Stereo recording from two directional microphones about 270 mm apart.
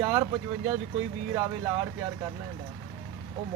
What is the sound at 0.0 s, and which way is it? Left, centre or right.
Speech, centre.